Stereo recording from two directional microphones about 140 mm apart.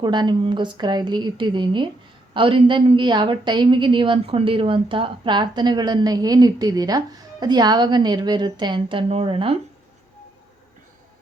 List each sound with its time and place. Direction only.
0.0 s a woman's voice: 30° right (ahead or behind)